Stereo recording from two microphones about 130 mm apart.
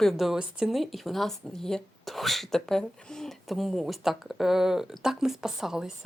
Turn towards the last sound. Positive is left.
turn(degrees=-5)  # may be behind; listen again after turning